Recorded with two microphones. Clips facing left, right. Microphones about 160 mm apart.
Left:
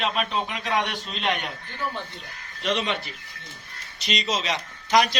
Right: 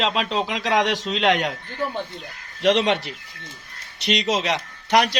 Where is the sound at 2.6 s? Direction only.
80° right.